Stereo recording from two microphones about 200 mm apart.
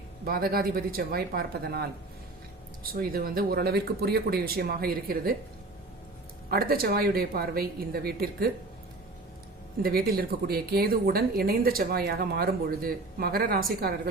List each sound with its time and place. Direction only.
0.3 s a woman's voice: 50° right (ahead or behind)
6.5 s a woman's voice: 50° right (ahead or behind)
9.8 s a woman's voice: 50° right (ahead or behind)